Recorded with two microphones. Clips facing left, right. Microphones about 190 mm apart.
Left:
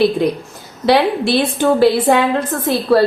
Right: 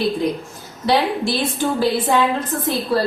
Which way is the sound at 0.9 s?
65° left (ahead or behind).